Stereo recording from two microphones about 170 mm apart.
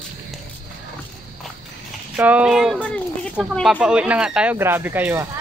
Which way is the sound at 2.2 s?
10° right (ahead or behind).